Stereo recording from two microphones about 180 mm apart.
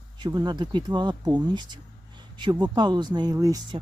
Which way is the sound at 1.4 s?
25° right (ahead or behind).